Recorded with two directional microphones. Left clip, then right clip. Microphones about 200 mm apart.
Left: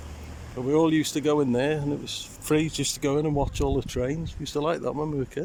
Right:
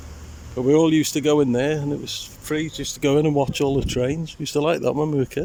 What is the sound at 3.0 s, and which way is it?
Speech, 5° right (ahead or behind).